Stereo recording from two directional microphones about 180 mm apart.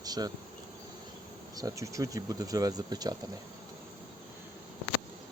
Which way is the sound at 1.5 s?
20° right (ahead or behind).